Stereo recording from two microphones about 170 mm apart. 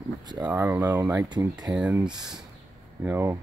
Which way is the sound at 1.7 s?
10° right (ahead or behind).